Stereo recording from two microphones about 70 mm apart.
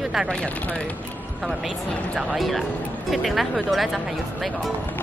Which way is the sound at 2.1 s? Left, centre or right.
Centre.